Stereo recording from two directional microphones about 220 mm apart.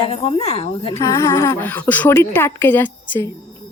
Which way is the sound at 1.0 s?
15° left (ahead or behind).